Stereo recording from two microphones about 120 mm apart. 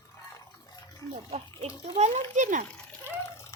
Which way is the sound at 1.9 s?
90° right.